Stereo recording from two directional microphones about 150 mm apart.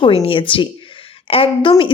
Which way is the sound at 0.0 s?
40° left (ahead or behind).